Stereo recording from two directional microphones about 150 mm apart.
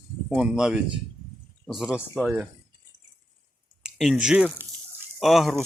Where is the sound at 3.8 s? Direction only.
Centre (ahead or behind).